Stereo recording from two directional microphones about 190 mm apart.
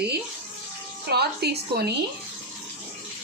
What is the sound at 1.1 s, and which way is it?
Speech, 60° right (ahead or behind).